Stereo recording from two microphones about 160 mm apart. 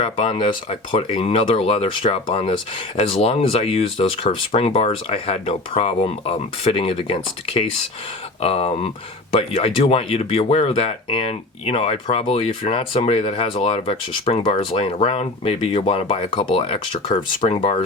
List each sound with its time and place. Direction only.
0.3 s speech: 30° left (ahead or behind)